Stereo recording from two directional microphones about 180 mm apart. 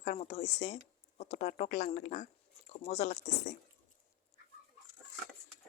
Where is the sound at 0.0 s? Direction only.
40° left (ahead or behind).